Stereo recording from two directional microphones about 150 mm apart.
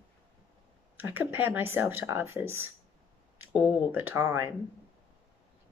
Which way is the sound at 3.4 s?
15° right (ahead or behind).